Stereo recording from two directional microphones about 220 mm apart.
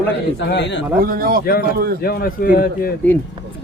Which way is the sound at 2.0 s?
45° left (ahead or behind).